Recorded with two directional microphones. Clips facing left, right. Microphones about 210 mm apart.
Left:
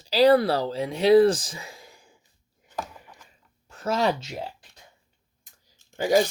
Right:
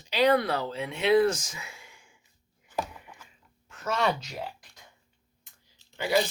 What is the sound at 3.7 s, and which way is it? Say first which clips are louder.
Speech: left 4 dB; 35° left (ahead or behind).